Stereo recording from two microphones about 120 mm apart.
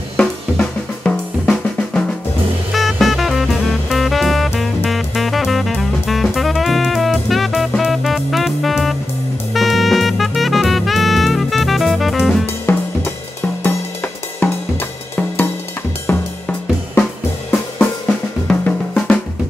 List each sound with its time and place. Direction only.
0.2 s drum kit: 10° left (ahead or behind)
2.7 s music: centre (ahead or behind)
12.7 s drum kit: 20° left (ahead or behind)
14.4 s cymbal: 15° left (ahead or behind)
16.1 s cymbal: 15° left (ahead or behind)
18.0 s drum: 10° left (ahead or behind)